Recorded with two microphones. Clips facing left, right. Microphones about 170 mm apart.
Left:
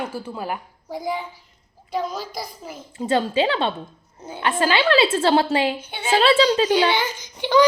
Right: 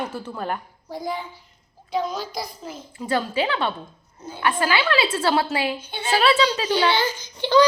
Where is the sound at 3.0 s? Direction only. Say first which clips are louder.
Left 3 dB; 25° left (ahead or behind).